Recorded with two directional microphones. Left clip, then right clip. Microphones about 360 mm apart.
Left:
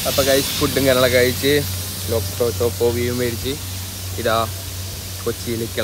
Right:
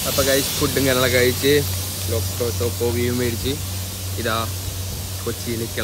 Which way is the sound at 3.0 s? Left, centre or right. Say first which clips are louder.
Left 1 dB; centre.